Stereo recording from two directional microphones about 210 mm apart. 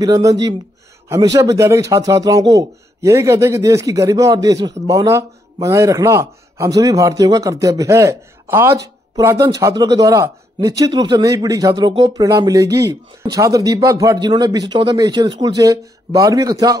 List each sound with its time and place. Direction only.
0.0 s a man's voice: 15° right (ahead or behind)